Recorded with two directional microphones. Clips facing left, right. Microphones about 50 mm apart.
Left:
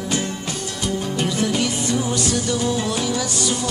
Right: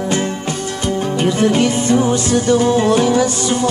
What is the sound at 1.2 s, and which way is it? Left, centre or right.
Music, right.